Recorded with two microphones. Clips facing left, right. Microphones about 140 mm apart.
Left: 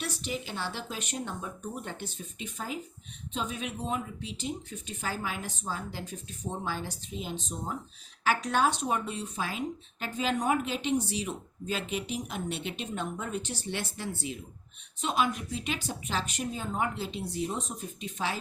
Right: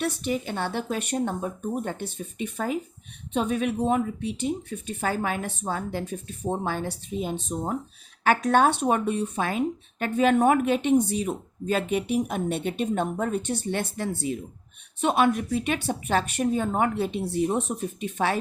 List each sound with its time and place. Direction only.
0.0 s speech: 55° right (ahead or behind)